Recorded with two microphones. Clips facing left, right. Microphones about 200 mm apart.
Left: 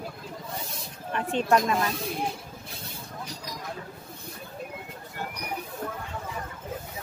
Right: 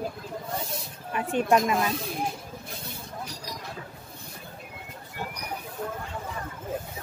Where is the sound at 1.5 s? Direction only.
15° right (ahead or behind).